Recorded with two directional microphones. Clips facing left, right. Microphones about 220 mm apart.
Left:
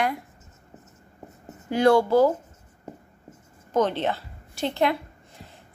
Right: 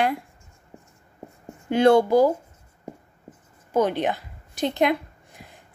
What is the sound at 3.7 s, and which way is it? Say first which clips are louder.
A woman's voice: right 1 dB; 10° right (ahead or behind).